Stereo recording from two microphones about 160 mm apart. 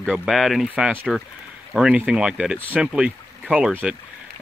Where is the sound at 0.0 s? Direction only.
Centre (ahead or behind).